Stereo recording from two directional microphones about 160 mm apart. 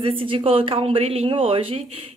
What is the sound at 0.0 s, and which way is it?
A woman's voice, 35° right (ahead or behind).